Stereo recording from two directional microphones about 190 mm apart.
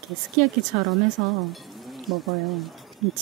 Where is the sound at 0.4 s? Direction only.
Centre (ahead or behind).